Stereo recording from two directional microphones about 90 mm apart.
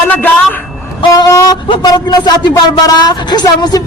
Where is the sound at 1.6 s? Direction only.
70° left (ahead or behind).